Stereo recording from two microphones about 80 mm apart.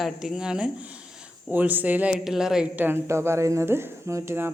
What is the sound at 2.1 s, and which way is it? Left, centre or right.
Speech, centre.